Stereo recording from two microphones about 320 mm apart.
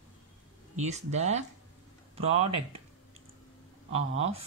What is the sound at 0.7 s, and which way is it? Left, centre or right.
Speech, right.